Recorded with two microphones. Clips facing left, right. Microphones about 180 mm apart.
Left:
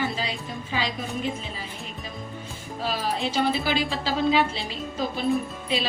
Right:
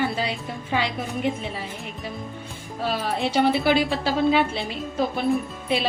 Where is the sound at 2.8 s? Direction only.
60° right (ahead or behind).